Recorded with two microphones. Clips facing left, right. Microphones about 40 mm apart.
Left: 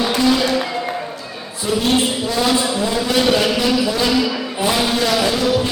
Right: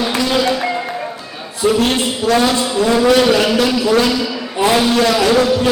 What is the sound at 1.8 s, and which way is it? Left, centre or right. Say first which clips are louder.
Music: right 1 dB; right.